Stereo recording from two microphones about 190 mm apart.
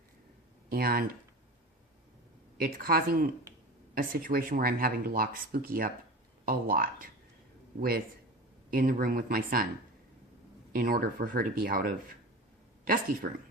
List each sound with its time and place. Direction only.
0.7 s speech: 50° right (ahead or behind)
2.6 s speech: 50° right (ahead or behind)
10.7 s speech: 50° right (ahead or behind)